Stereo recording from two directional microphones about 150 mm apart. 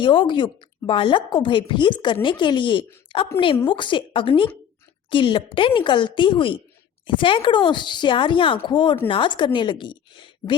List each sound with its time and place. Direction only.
0.0 s a woman's voice: 35° left (ahead or behind)